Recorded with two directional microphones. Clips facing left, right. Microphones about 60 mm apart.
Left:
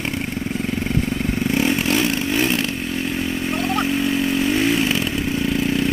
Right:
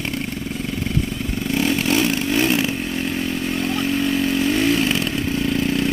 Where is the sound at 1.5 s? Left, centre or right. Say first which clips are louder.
Right 1 dB; centre.